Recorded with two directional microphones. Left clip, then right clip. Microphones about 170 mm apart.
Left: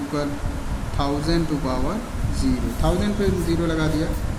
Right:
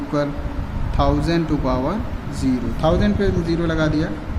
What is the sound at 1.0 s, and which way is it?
Speech, 30° right (ahead or behind).